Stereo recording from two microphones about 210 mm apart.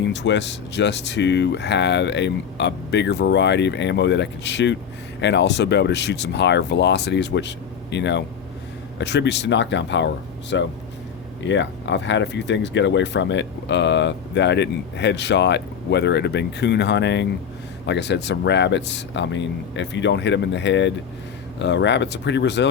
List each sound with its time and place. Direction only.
0.1 s speech: 55° left (ahead or behind)